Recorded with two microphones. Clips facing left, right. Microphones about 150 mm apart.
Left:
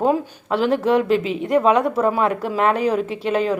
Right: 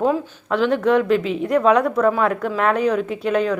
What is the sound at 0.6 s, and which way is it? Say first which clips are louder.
Speech: even; 35° left (ahead or behind).